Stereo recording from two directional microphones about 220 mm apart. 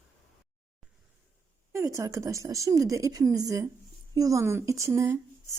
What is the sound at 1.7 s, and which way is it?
A woman's voice, 15° right (ahead or behind).